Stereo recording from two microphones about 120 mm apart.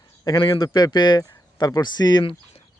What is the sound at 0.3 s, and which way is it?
Speech, 45° left (ahead or behind).